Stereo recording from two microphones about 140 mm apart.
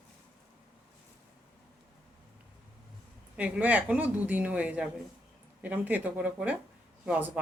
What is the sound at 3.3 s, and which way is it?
A woman's voice, 10° right (ahead or behind).